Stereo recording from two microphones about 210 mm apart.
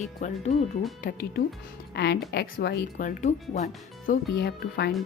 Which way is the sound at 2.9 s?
35° left (ahead or behind).